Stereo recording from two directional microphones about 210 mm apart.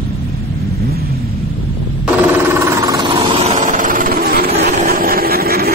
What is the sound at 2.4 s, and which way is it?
Vehicle, 15° right (ahead or behind).